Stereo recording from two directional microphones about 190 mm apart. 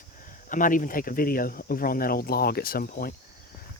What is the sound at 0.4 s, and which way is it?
Speech, 45° left (ahead or behind).